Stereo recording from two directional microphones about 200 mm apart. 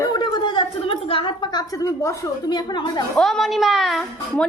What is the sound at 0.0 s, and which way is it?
A woman's voice, 20° left (ahead or behind).